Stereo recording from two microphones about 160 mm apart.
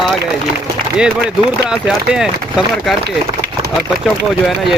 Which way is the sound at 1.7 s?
5° right (ahead or behind).